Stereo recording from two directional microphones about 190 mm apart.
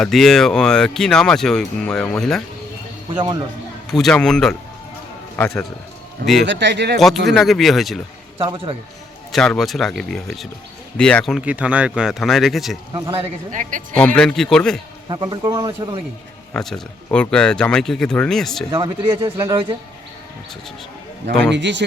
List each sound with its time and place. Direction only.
0.0 s speech: centre (ahead or behind)
3.9 s speech: 5° left (ahead or behind)
6.4 s speech: 70° right (ahead or behind)
7.3 s speech: centre (ahead or behind)
8.4 s a man's voice: 30° right (ahead or behind)
9.3 s speech: centre (ahead or behind)
12.9 s a man's voice: 30° right (ahead or behind)
13.9 s speech: 5° left (ahead or behind)
15.1 s a man's voice: 20° right (ahead or behind)
16.5 s speech: 5° left (ahead or behind)
18.7 s a man's voice: 25° right (ahead or behind)
21.5 s speech: 65° right (ahead or behind)